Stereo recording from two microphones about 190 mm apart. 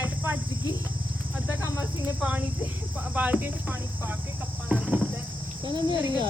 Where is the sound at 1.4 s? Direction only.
10° right (ahead or behind).